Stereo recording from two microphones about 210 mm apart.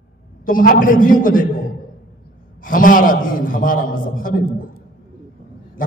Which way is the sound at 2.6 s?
40° left (ahead or behind).